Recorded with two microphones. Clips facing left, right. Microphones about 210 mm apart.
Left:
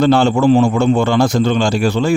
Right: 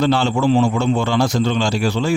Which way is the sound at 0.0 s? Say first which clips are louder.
Left 5 dB; 50° left (ahead or behind).